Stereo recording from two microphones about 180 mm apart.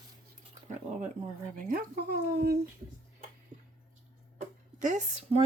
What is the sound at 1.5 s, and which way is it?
Speech, 50° right (ahead or behind).